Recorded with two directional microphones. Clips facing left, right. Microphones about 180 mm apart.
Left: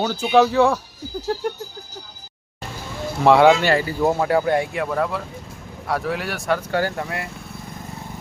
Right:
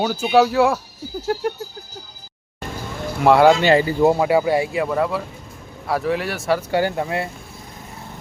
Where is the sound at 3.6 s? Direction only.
20° right (ahead or behind); by 6.6 s centre (ahead or behind).